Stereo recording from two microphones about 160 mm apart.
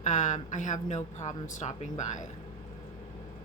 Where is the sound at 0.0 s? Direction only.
50° left (ahead or behind).